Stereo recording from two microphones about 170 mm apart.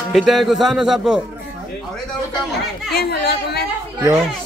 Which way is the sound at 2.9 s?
70° left (ahead or behind).